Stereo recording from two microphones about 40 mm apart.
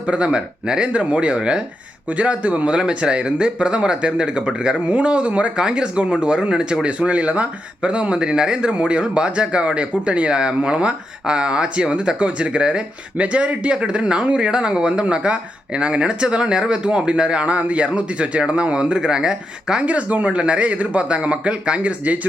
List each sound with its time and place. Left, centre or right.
0.1 s speech: right
5.5 s speech: right
19.8 s speech: right